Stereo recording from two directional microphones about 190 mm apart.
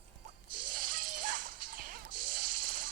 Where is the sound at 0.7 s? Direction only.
45° right (ahead or behind).